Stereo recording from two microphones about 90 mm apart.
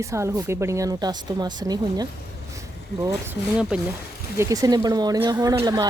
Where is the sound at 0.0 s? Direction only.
35° right (ahead or behind).